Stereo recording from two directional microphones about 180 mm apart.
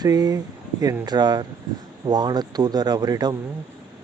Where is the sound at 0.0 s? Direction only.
20° right (ahead or behind).